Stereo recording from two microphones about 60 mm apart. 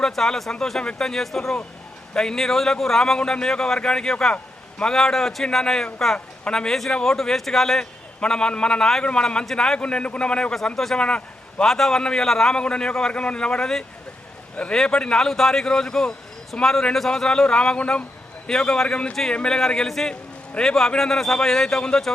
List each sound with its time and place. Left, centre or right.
0.0 s a man's voice: centre
11.7 s speech: centre